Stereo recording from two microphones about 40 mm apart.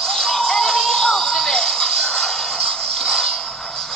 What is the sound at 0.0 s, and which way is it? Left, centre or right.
Music, centre.